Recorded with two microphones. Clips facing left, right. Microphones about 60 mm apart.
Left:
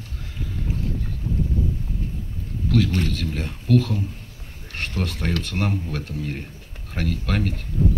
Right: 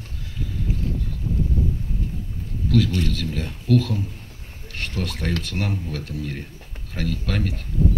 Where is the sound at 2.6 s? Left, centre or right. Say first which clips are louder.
Even; left.